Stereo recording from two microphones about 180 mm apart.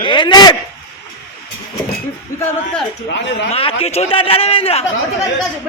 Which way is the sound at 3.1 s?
85° left.